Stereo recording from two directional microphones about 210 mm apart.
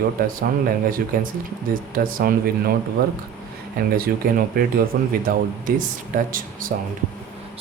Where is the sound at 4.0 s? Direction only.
45° right (ahead or behind).